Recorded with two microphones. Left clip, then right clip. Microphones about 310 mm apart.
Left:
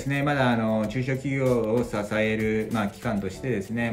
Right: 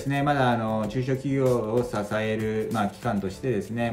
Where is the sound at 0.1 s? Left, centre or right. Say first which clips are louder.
Right 1 dB; centre.